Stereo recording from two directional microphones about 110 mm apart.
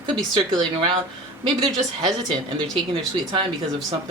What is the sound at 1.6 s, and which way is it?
Speech, 40° right (ahead or behind).